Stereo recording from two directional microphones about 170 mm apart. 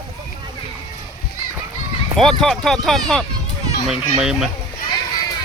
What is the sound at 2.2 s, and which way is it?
Speech, 5° left (ahead or behind).